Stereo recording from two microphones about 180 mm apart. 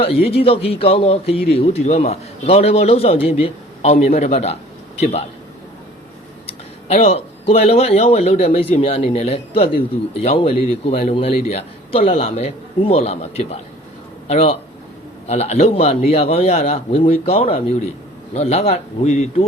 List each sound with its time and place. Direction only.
0.0 s a man's voice: 30° left (ahead or behind)
6.8 s a man's voice: 35° left (ahead or behind)